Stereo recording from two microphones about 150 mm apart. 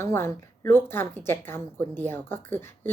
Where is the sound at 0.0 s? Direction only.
15° left (ahead or behind).